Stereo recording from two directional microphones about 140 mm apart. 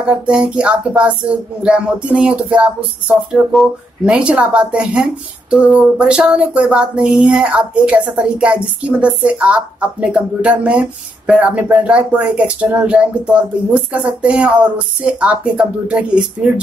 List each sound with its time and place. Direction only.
0.0 s speech: 5° right (ahead or behind)